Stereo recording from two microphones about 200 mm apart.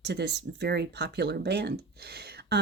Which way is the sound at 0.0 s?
55° right (ahead or behind).